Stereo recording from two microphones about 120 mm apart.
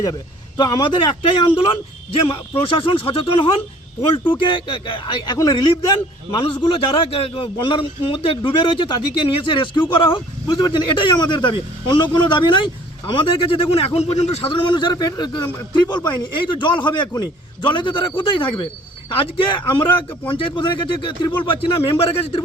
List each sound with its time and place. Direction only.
0.0 s a man's voice: 30° left (ahead or behind); by 14.5 s 65° left (ahead or behind)
14.5 s a man's voice: 40° left (ahead or behind)